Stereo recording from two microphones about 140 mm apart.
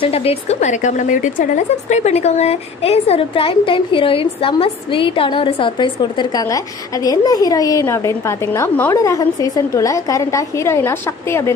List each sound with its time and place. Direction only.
0.0 s a woman's voice: 45° left (ahead or behind); by 11.5 s 15° left (ahead or behind)